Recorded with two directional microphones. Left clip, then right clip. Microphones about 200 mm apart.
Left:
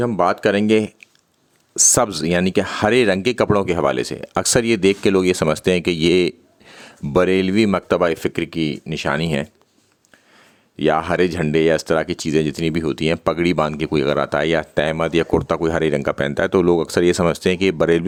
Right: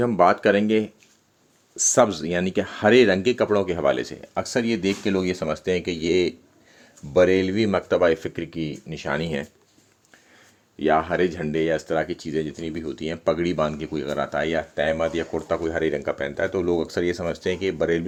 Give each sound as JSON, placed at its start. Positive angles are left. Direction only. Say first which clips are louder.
{"t": 0.0, "sound": "speech", "louder": "left 1 dB", "side_deg": 15}
{"t": 10.8, "sound": "speech", "louder": "left 3 dB", "side_deg": 35}